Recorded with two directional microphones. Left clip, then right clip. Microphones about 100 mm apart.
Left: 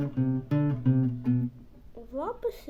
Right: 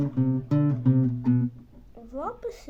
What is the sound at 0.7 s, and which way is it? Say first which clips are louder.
Music: right 3 dB; 15° right (ahead or behind).